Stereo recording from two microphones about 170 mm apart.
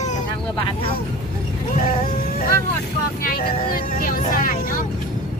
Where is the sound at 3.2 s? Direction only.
60° left (ahead or behind).